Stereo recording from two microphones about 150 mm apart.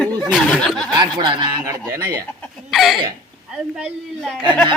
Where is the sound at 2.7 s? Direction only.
Centre (ahead or behind).